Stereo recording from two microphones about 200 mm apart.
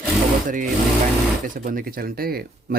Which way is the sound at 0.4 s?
40° right (ahead or behind).